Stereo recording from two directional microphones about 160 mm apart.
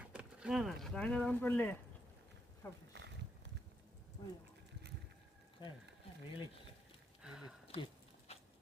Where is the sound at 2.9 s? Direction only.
90° right.